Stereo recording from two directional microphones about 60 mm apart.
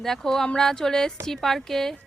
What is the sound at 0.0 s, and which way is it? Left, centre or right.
Speech, centre.